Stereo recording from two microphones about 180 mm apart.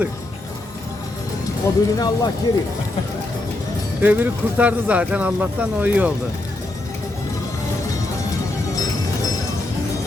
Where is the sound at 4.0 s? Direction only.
10° right (ahead or behind).